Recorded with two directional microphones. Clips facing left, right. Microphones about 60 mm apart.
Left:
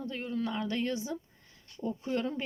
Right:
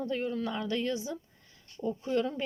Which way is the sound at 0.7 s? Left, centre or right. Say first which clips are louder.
Right 4 dB; left.